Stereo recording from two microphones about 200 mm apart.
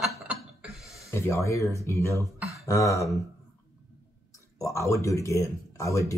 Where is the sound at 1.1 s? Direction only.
15° left (ahead or behind).